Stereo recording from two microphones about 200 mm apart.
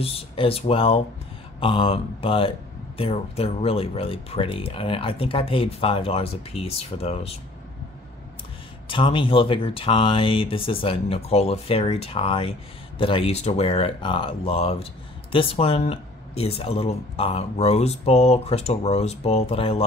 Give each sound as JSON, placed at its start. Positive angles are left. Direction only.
{"t": 0.0, "sound": "speech", "side_deg": 30}
{"t": 8.8, "sound": "speech", "side_deg": 25}